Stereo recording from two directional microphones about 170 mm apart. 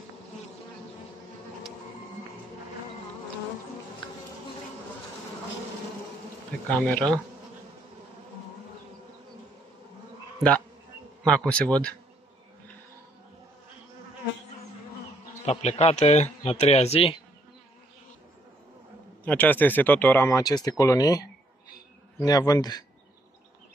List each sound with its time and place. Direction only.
6.7 s speech: 5° left (ahead or behind)
11.2 s speech: 5° left (ahead or behind)
15.4 s speech: 35° left (ahead or behind)
19.2 s speech: 10° left (ahead or behind)